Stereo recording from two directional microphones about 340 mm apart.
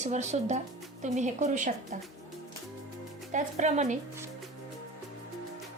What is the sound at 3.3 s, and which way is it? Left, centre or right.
Speech, right.